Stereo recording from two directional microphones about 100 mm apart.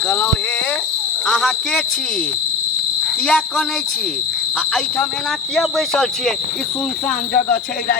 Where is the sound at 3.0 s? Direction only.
10° left (ahead or behind).